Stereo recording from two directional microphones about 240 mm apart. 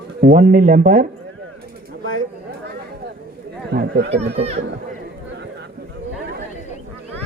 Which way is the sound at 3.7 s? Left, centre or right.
Right.